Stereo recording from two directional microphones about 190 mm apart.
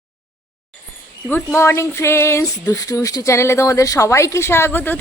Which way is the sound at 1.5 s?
15° left (ahead or behind).